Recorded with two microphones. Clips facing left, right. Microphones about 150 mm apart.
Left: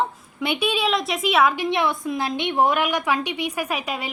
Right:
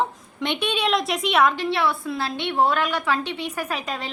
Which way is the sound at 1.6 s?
20° left (ahead or behind).